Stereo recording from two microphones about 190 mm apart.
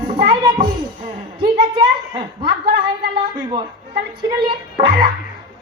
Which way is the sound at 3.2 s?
25° right (ahead or behind).